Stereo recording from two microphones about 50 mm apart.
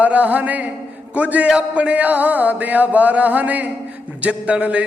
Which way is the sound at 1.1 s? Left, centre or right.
Right.